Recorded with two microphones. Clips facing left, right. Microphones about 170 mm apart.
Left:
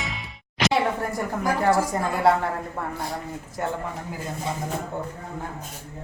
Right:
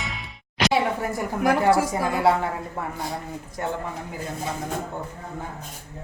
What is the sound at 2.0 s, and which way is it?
Speech, centre (ahead or behind).